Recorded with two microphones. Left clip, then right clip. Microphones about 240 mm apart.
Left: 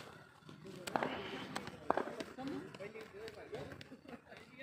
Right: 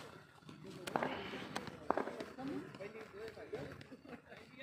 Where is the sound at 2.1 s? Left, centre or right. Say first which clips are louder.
Even; left.